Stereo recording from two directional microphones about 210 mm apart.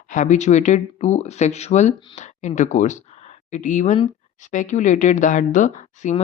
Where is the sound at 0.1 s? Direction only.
35° left (ahead or behind).